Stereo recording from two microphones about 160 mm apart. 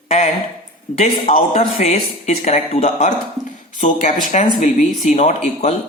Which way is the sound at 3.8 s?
55° left (ahead or behind).